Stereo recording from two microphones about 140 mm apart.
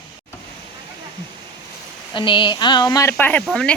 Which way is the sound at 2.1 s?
35° left (ahead or behind).